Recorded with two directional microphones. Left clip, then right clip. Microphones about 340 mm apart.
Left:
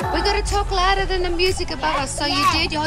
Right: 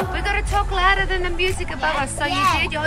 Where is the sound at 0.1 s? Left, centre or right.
Centre.